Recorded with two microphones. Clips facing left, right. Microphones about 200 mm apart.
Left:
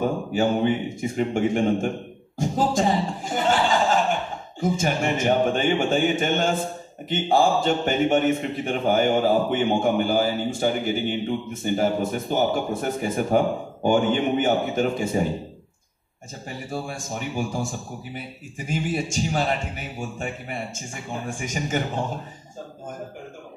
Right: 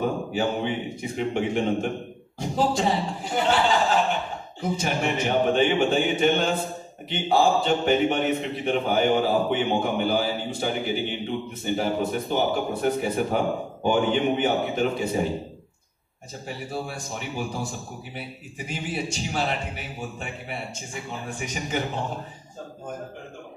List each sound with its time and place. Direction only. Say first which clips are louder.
0.3 s a man's voice: left 4 dB; 45° left (ahead or behind)
16.4 s a man's voice: left 1 dB; 45° left (ahead or behind)
18.7 s a man's voice: left 4 dB; 45° left (ahead or behind)